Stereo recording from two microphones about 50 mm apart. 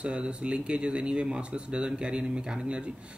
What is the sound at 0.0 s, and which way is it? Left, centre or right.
Speech, right.